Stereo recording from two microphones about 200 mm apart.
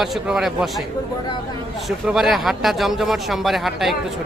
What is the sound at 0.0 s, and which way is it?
Speech, centre (ahead or behind).